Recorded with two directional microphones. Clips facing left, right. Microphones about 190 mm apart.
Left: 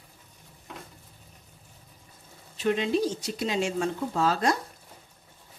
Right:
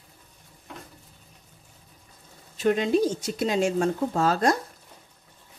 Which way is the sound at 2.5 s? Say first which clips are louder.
Right 3 dB; 45° right (ahead or behind).